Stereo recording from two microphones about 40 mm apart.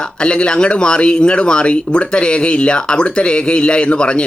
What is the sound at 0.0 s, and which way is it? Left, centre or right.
Speech, left.